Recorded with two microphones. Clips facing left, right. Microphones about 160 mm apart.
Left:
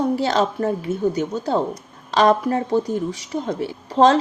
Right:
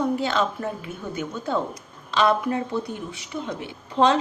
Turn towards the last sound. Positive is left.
turn(degrees=35)  # may be behind; listen again after turning